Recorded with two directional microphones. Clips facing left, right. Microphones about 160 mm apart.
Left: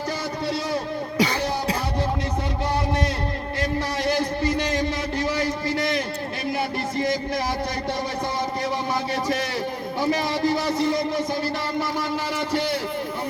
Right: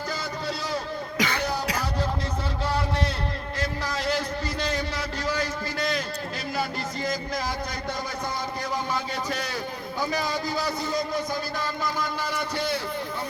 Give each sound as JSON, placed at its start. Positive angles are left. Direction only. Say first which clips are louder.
{"t": 1.2, "sound": "music", "louder": "left 4 dB", "side_deg": 30}
{"t": 10.0, "sound": "speech", "louder": "left 5 dB", "side_deg": 25}